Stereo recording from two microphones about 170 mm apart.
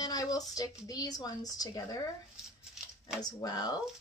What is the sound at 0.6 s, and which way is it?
Speech, 20° left (ahead or behind).